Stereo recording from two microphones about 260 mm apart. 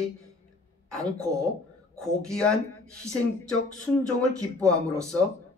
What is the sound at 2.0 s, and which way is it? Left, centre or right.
Speech, centre.